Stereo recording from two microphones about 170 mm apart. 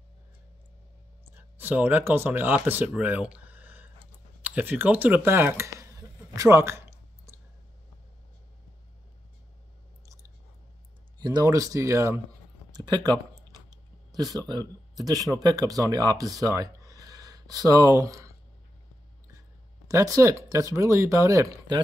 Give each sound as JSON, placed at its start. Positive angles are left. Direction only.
{"t": 1.3, "sound": "speech", "side_deg": -10}
{"t": 11.1, "sound": "speech", "side_deg": -25}
{"t": 19.9, "sound": "speech", "side_deg": -20}